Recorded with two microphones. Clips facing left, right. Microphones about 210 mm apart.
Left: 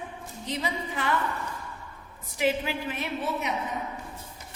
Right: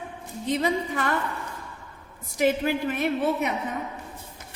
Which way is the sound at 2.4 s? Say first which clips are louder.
Right 4 dB; 50° right (ahead or behind).